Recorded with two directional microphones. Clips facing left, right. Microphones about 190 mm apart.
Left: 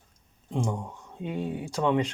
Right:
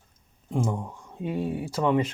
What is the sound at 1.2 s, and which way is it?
Speech, 20° left (ahead or behind).